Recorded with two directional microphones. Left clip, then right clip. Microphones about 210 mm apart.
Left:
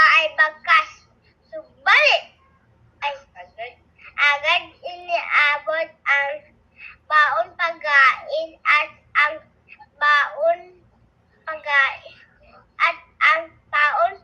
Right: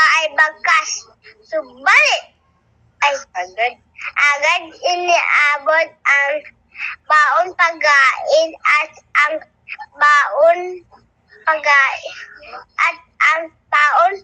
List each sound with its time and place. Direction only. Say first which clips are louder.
0.0 s child singing: right 1 dB; 45° right (ahead or behind)
0.7 s a sound: right 2 dB; 40° right (ahead or behind)
3.0 s telephone: right 11 dB; 45° right (ahead or behind)
11.4 s speech: right 7 dB; 45° right (ahead or behind)